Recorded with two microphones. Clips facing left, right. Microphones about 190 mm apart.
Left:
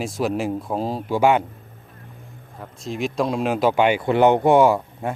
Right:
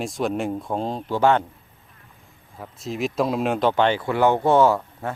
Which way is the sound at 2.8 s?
Centre (ahead or behind).